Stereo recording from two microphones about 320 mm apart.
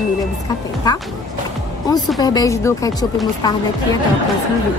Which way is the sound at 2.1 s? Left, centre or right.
Centre.